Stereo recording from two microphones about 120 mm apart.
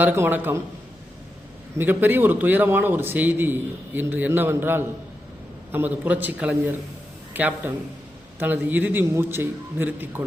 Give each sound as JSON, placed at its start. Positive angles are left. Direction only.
{"t": 0.0, "sound": "a man's voice", "side_deg": -15}
{"t": 1.8, "sound": "a man's voice", "side_deg": -15}